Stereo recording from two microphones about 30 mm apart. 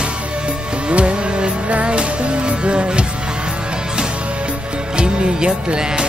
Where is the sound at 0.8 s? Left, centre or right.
Right.